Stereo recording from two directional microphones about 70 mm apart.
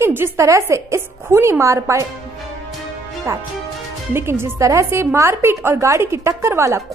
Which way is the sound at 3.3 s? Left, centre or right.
Right.